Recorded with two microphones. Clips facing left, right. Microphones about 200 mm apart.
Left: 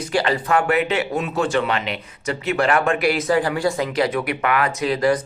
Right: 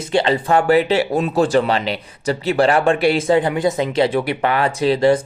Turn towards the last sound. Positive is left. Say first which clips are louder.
# right 4 dB
turn(degrees=-30)  # may be behind; listen again after turning